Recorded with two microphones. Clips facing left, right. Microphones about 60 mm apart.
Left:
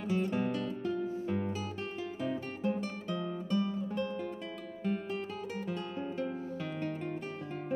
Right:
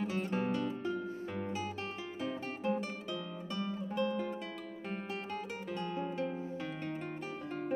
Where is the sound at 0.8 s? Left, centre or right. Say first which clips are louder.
Left 3 dB; right.